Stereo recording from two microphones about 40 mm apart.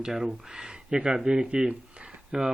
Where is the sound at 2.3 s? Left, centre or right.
Centre.